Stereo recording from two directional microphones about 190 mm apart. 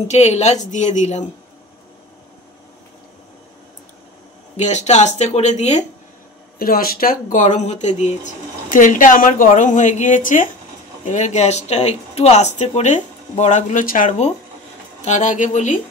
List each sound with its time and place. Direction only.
0.1 s speech: 35° left (ahead or behind)
4.6 s speech: 35° left (ahead or behind)
6.6 s speech: 50° left (ahead or behind)